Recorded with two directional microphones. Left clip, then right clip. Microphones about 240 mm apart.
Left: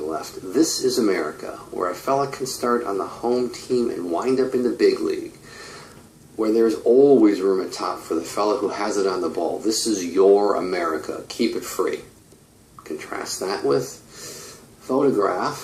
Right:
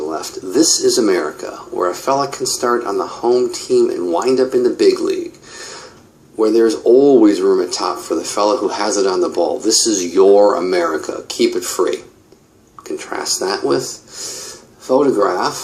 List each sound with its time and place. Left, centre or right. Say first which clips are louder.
0.1 s speech: right 6 dB; right
6.4 s speech: right 6 dB; right
13.0 s speech: right 8 dB; right
14.8 s speech: right 6 dB; right